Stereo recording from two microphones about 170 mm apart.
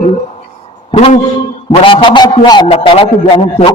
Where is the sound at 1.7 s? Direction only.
30° left (ahead or behind).